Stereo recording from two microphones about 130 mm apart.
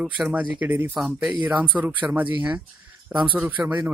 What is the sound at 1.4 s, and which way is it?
Speech, 10° right (ahead or behind).